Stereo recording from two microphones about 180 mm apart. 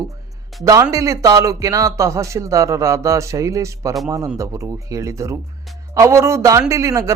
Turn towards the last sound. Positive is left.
turn(degrees=-15)  # may be behind; listen again after turning